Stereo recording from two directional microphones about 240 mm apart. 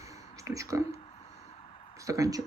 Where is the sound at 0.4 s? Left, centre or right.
Centre.